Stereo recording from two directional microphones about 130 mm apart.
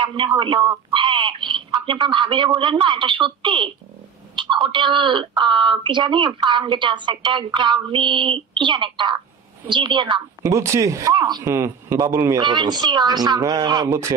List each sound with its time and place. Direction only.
0.0 s speech: 40° right (ahead or behind)
10.4 s speech: 25° right (ahead or behind)
11.4 s speech: 20° right (ahead or behind)
12.4 s speech: 35° right (ahead or behind)